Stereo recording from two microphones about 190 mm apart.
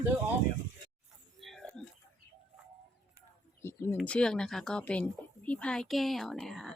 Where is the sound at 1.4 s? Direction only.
Centre (ahead or behind).